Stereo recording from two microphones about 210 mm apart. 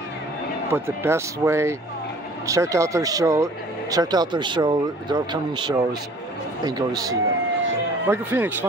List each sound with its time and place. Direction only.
0.7 s speech: 10° right (ahead or behind)